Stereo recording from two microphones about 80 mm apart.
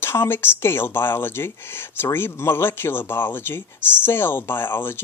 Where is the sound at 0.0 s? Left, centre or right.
Left.